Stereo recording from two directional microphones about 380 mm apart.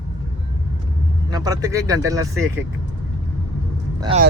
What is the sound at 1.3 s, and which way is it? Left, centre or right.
Speech, centre.